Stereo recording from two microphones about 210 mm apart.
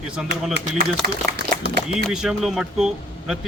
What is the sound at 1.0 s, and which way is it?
Speech, 45° right (ahead or behind).